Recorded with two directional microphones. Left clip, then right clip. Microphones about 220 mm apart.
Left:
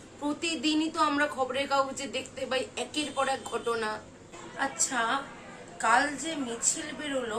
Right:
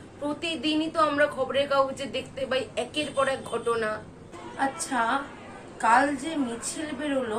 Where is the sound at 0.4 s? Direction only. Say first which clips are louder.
Right 1 dB; 15° left (ahead or behind).